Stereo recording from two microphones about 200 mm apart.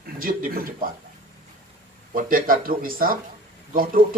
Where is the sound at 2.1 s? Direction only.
45° right (ahead or behind).